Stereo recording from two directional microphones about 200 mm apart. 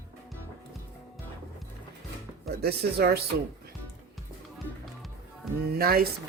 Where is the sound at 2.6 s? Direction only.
50° right (ahead or behind).